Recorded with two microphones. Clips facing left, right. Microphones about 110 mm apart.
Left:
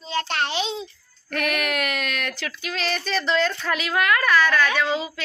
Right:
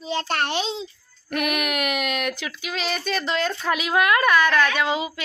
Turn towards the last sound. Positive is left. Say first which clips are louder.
# right 1 dB
turn(degrees=-15)  # may be behind; listen again after turning